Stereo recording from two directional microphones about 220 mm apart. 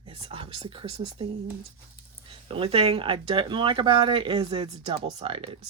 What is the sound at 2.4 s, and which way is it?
Speech, 25° right (ahead or behind).